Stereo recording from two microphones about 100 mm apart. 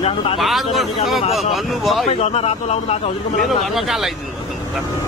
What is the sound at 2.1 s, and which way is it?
Speech, 90° left.